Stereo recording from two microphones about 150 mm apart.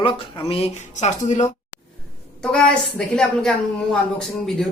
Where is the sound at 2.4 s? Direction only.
5° left (ahead or behind).